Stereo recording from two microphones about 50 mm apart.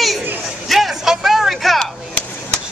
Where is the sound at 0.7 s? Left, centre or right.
Centre.